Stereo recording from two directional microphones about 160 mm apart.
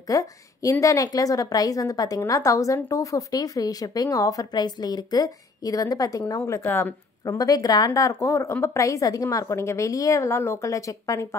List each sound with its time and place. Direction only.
0.1 s a woman's voice: 20° left (ahead or behind)